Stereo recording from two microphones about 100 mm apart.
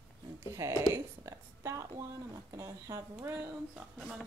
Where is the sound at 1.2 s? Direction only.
35° right (ahead or behind).